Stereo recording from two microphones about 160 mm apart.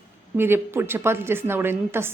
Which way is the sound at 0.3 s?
15° right (ahead or behind).